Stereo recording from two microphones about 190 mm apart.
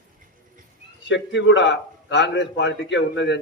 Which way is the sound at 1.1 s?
70° left (ahead or behind).